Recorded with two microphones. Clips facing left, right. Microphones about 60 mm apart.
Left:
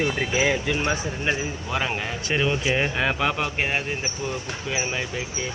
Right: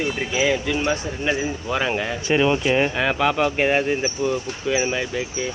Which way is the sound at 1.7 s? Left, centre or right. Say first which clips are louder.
Right 4 dB; centre.